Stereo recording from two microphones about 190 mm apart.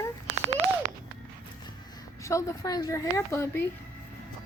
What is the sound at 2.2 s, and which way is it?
A woman's voice, 15° left (ahead or behind).